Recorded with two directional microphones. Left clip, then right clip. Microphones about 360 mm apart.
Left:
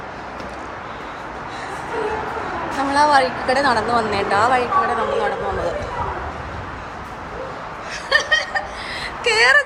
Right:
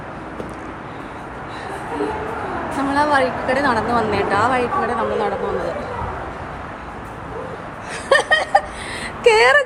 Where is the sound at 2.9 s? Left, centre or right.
Centre.